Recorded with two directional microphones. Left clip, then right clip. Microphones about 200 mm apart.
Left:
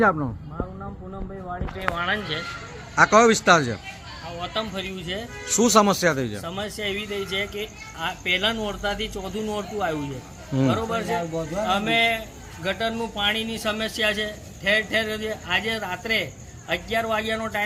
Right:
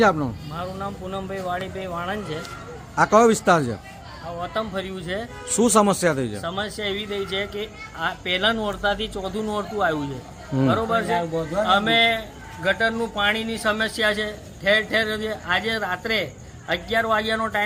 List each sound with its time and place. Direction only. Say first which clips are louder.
0.0 s a man's voice: right 2 dB; 20° right (ahead or behind); by 17.6 s 5° right (ahead or behind)